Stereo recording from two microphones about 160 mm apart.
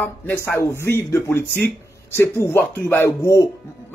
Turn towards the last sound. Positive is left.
turn(degrees=15)  # may be behind; listen again after turning